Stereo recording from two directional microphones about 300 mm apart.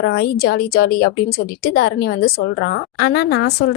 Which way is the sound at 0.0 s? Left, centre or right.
Left.